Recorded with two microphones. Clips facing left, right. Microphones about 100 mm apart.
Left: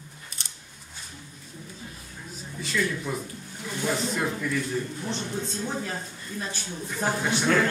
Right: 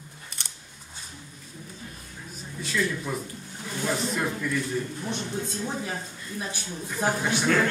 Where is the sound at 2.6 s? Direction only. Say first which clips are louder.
Even; centre (ahead or behind).